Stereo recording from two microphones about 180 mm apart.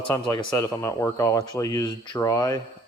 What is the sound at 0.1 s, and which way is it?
Speech, 15° left (ahead or behind).